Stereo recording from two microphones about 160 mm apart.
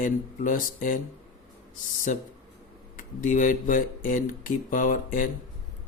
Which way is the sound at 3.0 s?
55° left (ahead or behind).